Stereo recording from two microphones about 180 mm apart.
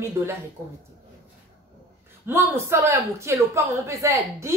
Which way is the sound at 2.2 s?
15° right (ahead or behind).